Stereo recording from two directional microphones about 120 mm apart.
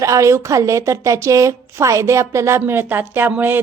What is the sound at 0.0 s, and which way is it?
A woman's voice, 25° right (ahead or behind).